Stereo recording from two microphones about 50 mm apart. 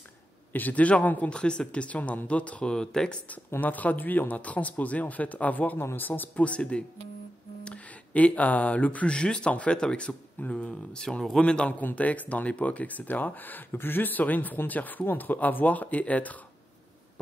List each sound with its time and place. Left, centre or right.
0.5 s speech: left
1.3 s speech: centre
2.7 s speech: centre
3.6 s speech: left
5.8 s speech: left
6.4 s speech: left
11.4 s speech: left
11.8 s speech: left